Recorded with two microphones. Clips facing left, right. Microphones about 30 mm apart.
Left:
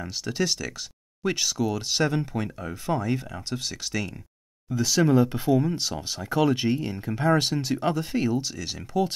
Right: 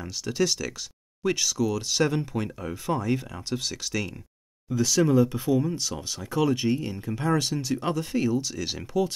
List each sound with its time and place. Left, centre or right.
0.0 s speech: centre
2.0 s speech: centre
4.9 s speech: left
7.9 s speech: centre
8.5 s speech: centre